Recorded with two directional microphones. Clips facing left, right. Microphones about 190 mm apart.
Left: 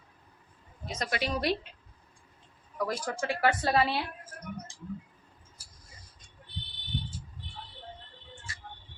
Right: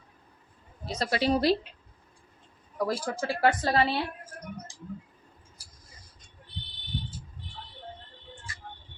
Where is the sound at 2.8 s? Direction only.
30° right (ahead or behind).